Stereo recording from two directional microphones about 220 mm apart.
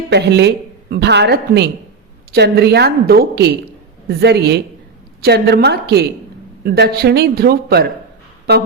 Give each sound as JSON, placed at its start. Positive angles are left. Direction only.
{"t": 0.1, "sound": "a woman's voice", "side_deg": -50}